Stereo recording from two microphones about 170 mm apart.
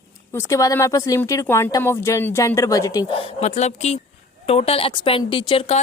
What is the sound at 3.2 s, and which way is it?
A woman's voice, 35° left (ahead or behind).